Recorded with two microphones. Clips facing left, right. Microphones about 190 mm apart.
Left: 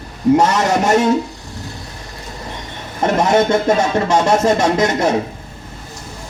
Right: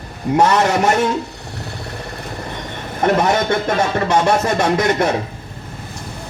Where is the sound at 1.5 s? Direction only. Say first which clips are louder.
Right 2 dB; 65° right (ahead or behind).